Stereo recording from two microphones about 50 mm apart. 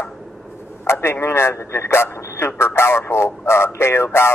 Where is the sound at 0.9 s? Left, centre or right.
Left.